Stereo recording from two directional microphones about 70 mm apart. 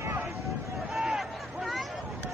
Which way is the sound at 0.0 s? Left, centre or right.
Right.